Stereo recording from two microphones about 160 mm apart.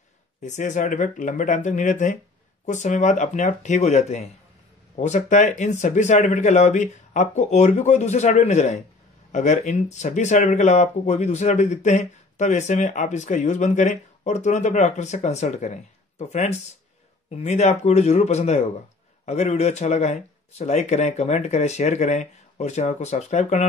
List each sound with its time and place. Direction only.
0.4 s speech: 50° left (ahead or behind)